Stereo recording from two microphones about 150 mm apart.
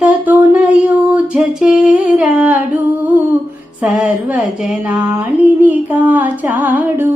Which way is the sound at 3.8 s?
10° right (ahead or behind).